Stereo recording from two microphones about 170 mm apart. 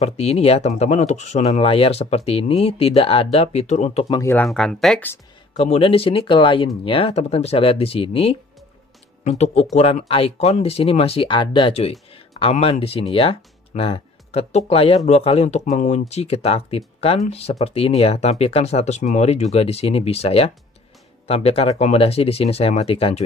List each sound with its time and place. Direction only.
0.0 s speech: 40° left (ahead or behind)
4.2 s speech: 15° left (ahead or behind)
4.5 s speech: 5° left (ahead or behind)
5.6 s speech: 35° left (ahead or behind)